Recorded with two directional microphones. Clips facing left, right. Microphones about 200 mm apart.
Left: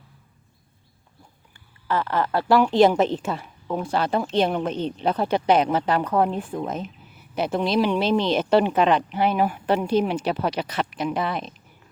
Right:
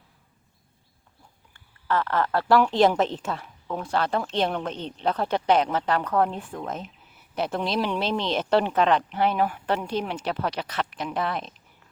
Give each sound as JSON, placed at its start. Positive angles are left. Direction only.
{"t": 1.5, "sound": "a woman's voice", "side_deg": 5}